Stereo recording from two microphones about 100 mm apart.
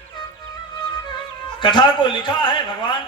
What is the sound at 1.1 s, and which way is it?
A man's voice, 55° left (ahead or behind).